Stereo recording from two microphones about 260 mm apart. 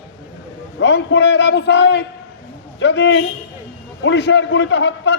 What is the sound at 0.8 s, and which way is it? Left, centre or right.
A man's voice, left.